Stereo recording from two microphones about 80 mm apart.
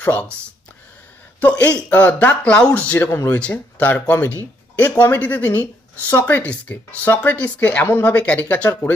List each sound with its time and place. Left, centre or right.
0.0 s speech: left
1.4 s speech: centre
3.1 s speech: left
3.3 s speech: centre